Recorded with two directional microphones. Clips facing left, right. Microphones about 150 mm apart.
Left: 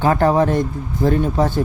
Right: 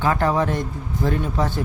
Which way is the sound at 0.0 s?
35° left (ahead or behind).